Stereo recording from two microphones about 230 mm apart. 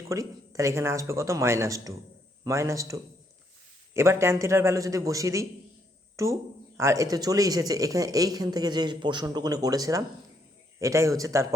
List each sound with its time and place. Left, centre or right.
0.1 s speech: centre